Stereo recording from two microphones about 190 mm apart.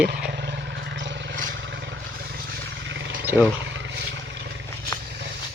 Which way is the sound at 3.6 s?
70° right (ahead or behind).